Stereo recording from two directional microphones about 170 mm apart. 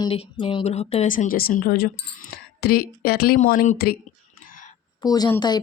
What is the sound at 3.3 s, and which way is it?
Speech, 55° left (ahead or behind).